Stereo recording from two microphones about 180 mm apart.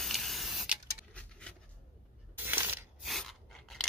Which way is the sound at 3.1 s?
Centre (ahead or behind).